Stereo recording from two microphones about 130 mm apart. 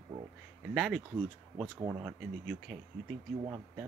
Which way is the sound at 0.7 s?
Centre (ahead or behind).